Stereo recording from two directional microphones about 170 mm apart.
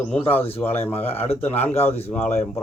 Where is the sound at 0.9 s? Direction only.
35° left (ahead or behind).